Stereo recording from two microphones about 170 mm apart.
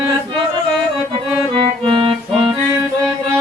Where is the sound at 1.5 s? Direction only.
30° right (ahead or behind).